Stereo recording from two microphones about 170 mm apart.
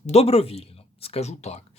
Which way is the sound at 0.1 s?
35° left (ahead or behind).